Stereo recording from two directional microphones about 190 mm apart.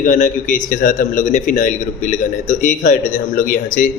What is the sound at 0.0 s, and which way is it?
A man's voice, 40° left (ahead or behind).